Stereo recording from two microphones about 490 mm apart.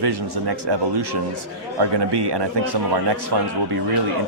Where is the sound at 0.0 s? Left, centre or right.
Right.